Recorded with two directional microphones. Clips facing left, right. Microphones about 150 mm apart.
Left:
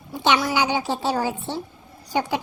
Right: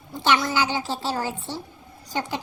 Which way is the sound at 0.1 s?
15° left (ahead or behind).